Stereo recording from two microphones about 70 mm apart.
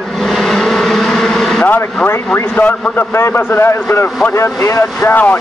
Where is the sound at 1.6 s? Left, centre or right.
Left.